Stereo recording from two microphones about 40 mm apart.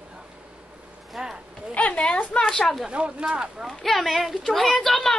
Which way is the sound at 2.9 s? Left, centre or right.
Right.